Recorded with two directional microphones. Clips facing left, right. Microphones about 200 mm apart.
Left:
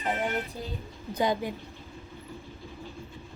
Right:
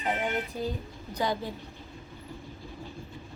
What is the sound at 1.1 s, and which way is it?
Speech, 20° left (ahead or behind).